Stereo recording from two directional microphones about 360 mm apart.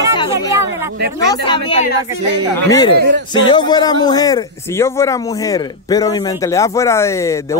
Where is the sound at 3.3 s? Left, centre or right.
Centre.